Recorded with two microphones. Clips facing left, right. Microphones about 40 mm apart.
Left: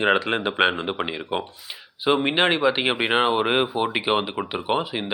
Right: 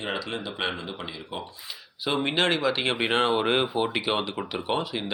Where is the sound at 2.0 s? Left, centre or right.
Left.